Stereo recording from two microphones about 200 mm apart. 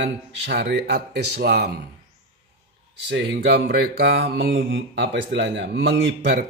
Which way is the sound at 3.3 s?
60° right (ahead or behind).